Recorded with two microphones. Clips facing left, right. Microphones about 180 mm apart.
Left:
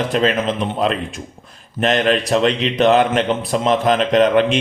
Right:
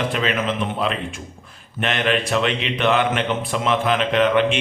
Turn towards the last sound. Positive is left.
turn(degrees=40)  # may be behind; listen again after turning